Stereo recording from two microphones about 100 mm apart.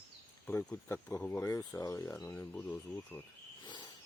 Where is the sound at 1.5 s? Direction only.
35° left (ahead or behind).